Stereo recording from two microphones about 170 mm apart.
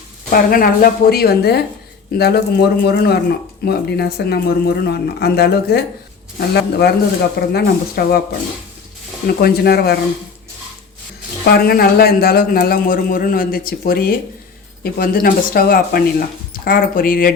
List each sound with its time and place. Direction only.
0.3 s speech: 55° left (ahead or behind)
9.2 s speech: 65° left (ahead or behind)
11.4 s speech: 65° left (ahead or behind)